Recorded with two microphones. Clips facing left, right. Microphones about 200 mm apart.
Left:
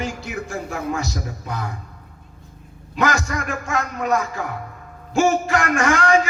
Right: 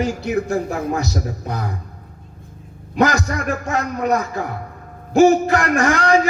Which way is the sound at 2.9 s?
35° right (ahead or behind).